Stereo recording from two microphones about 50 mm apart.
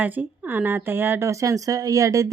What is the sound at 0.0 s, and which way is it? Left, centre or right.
A woman's voice, right.